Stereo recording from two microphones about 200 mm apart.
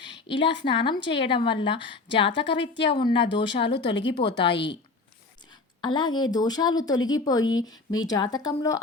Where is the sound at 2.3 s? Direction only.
60° left (ahead or behind).